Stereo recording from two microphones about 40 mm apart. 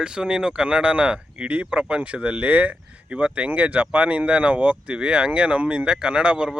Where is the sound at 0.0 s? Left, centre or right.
Right.